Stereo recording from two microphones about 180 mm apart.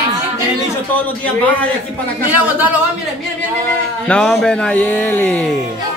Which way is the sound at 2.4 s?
10° right (ahead or behind).